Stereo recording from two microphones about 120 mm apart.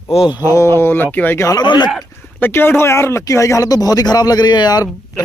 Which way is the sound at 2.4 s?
20° left (ahead or behind).